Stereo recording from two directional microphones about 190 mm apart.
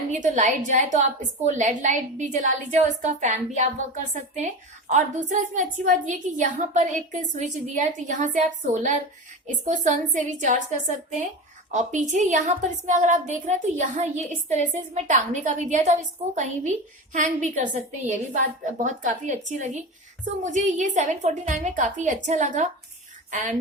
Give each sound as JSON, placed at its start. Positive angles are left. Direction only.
{"t": 0.1, "sound": "a woman's voice", "side_deg": -40}